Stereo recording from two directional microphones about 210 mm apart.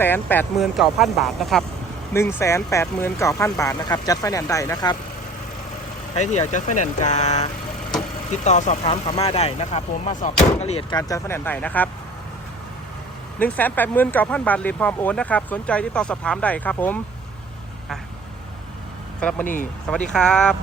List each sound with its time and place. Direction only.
0.0 s speech: 10° left (ahead or behind)
2.1 s speech: 15° left (ahead or behind)
6.1 s speech: 35° left (ahead or behind)
10.9 s speech: 15° left (ahead or behind)
13.4 s speech: 10° left (ahead or behind)
19.2 s speech: 5° left (ahead or behind)